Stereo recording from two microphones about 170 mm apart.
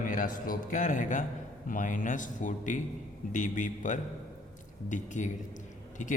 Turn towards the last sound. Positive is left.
turn(degrees=45)  # may be behind; listen again after turning